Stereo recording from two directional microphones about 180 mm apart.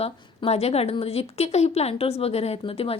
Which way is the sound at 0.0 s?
35° left (ahead or behind).